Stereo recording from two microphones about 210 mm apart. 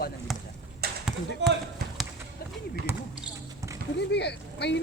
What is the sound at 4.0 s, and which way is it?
Speech, 55° left (ahead or behind).